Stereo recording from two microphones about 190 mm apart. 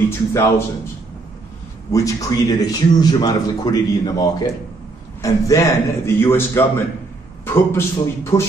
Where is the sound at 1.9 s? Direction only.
15° left (ahead or behind).